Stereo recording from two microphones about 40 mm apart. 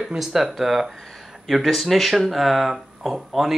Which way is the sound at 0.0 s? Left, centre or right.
Centre.